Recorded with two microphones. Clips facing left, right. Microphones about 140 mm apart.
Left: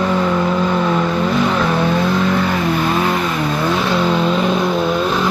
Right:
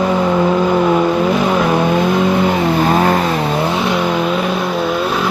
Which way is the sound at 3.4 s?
25° right (ahead or behind).